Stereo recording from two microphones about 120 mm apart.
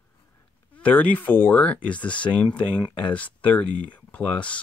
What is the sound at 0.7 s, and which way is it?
Speech, 15° left (ahead or behind).